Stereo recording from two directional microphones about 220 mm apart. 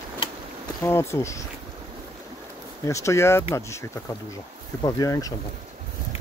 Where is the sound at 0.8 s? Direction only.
10° left (ahead or behind).